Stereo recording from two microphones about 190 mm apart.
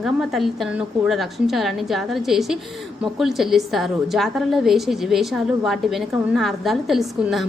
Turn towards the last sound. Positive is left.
turn(degrees=0)  # may be behind; listen again after turning